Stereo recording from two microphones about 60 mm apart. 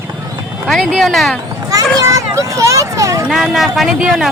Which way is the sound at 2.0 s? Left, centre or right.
Right.